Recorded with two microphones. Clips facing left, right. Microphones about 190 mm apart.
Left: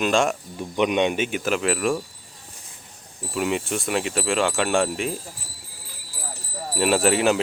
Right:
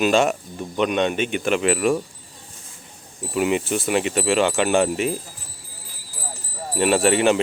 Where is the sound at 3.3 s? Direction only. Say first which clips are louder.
Right 4 dB; 5° right (ahead or behind).